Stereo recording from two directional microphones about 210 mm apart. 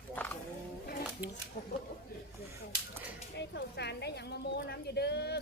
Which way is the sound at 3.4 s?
55° left (ahead or behind).